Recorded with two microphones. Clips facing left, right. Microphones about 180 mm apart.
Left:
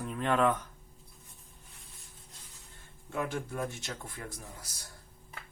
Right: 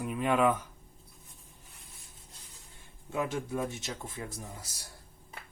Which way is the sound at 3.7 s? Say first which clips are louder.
Right 2 dB; 20° right (ahead or behind).